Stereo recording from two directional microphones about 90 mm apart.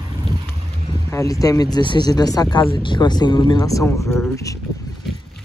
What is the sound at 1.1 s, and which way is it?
Speech, 40° left (ahead or behind).